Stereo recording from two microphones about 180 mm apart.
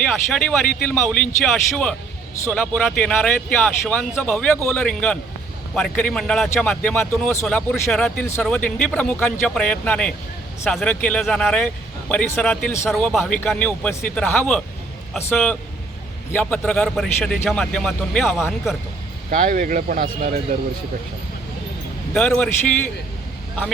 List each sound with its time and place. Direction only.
0.0 s a man's voice: 5° left (ahead or behind)
19.3 s speech: 50° right (ahead or behind)
22.1 s speech: 5° left (ahead or behind)